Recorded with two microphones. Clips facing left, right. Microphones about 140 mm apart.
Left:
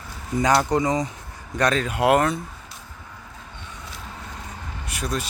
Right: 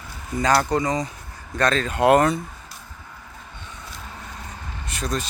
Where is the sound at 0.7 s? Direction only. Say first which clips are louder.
Left 1 dB; 20° left (ahead or behind); by 2.4 s centre (ahead or behind).